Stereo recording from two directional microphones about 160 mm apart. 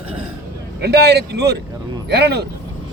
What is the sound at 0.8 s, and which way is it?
Speech, 90° right.